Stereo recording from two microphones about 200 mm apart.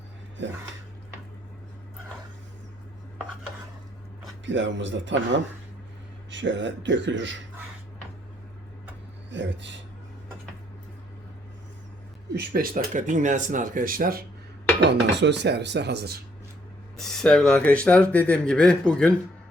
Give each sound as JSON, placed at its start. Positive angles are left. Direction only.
{"t": 0.4, "sound": "speech", "side_deg": -65}
{"t": 4.4, "sound": "speech", "side_deg": -65}
{"t": 9.3, "sound": "speech", "side_deg": -65}
{"t": 12.3, "sound": "speech", "side_deg": -45}
{"t": 14.8, "sound": "speech", "side_deg": -60}
{"t": 17.0, "sound": "speech", "side_deg": 0}